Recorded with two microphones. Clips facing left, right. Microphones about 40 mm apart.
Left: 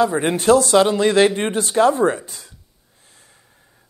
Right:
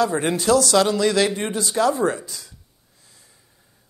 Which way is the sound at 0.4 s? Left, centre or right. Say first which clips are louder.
Left 4 dB; left.